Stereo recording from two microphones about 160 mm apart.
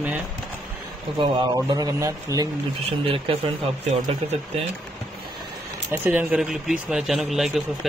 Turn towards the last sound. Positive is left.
turn(degrees=0)  # may be behind; listen again after turning